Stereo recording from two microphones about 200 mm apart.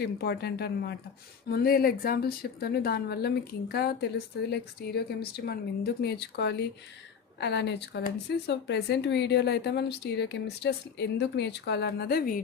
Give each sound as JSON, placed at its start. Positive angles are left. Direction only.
{"t": 0.0, "sound": "a woman's voice", "side_deg": 50}